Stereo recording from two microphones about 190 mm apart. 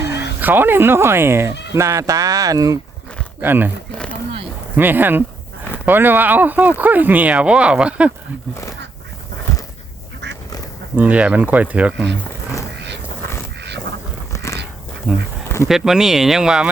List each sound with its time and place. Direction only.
0.3 s speech: 10° right (ahead or behind)
3.9 s a sound: 5° left (ahead or behind)
4.8 s speech: 10° right (ahead or behind)
10.9 s speech: 10° right (ahead or behind)
14.3 s dog: 15° left (ahead or behind)
15.1 s speech: 5° right (ahead or behind)